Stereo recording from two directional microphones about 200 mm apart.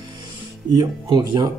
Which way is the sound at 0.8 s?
20° right (ahead or behind).